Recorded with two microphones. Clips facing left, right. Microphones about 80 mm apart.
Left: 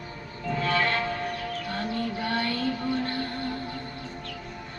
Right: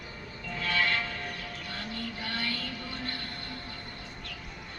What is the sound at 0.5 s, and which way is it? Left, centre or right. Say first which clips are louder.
Train: left 4 dB; left.